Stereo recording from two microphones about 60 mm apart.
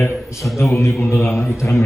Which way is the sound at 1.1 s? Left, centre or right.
Left.